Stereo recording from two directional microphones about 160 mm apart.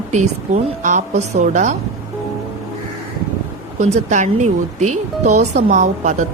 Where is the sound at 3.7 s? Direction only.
45° right (ahead or behind).